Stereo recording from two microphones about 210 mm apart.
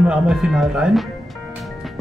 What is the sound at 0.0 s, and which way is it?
Speech, 5° right (ahead or behind).